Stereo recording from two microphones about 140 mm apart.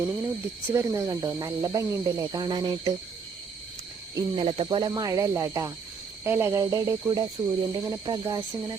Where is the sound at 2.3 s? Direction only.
30° right (ahead or behind).